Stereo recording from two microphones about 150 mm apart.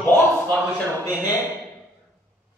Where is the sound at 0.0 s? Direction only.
15° left (ahead or behind).